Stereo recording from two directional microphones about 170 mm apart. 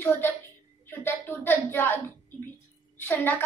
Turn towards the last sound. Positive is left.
turn(degrees=15)  # may be behind; listen again after turning